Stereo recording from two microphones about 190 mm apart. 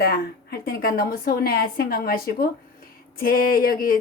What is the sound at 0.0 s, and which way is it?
A woman's voice, 55° left (ahead or behind).